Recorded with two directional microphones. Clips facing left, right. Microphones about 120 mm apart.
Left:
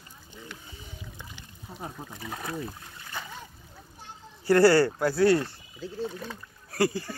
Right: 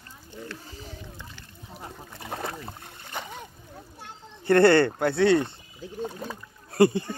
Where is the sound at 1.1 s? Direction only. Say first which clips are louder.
Right 1 dB; 15° left (ahead or behind).